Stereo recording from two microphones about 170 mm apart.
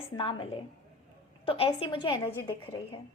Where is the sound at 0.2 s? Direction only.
30° left (ahead or behind).